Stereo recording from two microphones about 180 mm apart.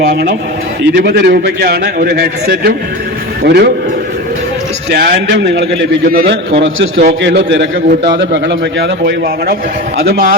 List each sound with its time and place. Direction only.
0.0 s a man's voice: 65° right (ahead or behind)
4.9 s a man's voice: 65° right (ahead or behind)
7.9 s a man's voice: 55° right (ahead or behind)
8.2 s a man's voice: 75° right (ahead or behind); by 10.3 s 55° right (ahead or behind)